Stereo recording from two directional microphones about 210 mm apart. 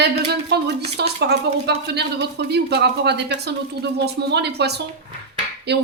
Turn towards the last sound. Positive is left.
turn(degrees=-50)  # may be behind; listen again after turning